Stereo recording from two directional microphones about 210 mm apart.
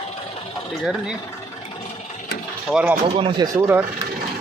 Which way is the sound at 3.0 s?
25° right (ahead or behind).